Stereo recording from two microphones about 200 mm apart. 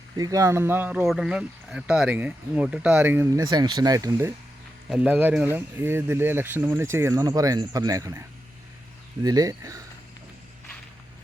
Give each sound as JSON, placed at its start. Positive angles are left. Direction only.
{"t": 0.2, "sound": "speech", "side_deg": -15}
{"t": 9.2, "sound": "speech", "side_deg": -20}